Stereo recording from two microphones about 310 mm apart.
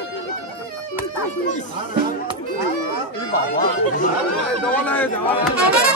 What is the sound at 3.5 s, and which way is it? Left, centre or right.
Chatter, left.